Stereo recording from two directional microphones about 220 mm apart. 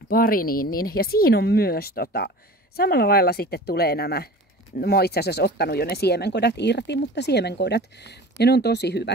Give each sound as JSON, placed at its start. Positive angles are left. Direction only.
{"t": 0.1, "sound": "speech", "side_deg": 40}